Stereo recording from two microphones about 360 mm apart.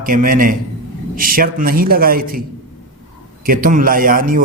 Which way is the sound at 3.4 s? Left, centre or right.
Right.